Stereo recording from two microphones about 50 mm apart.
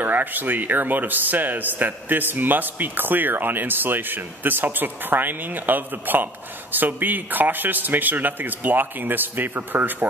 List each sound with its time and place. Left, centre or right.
0.0 s speech: right